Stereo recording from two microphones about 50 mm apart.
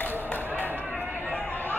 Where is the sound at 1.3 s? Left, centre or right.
Left.